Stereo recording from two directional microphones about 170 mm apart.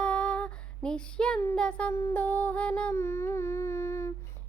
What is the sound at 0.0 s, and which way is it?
Female singing, 5° left (ahead or behind).